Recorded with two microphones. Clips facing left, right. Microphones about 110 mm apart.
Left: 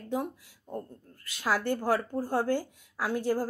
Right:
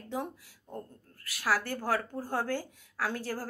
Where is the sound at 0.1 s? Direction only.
15° left (ahead or behind).